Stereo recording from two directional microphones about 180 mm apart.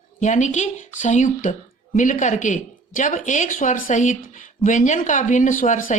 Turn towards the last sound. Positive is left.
turn(degrees=45)  # may be behind; listen again after turning